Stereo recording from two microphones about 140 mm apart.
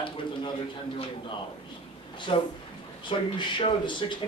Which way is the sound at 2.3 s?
35° left (ahead or behind).